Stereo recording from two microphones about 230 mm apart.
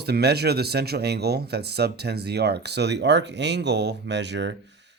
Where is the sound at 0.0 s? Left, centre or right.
Right.